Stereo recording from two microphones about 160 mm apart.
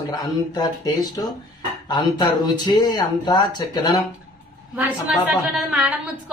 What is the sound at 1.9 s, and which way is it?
Speech, 25° left (ahead or behind).